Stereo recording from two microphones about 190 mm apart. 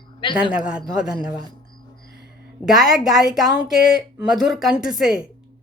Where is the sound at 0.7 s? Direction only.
5° right (ahead or behind).